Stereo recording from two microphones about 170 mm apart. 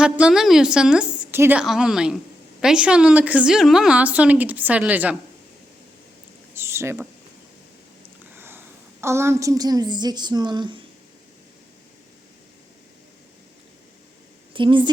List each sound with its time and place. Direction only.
0.0 s a woman's voice: 5° right (ahead or behind)
6.5 s a sound: 15° right (ahead or behind)
8.4 s a woman's voice: 15° right (ahead or behind)
14.5 s a woman's voice: 30° right (ahead or behind)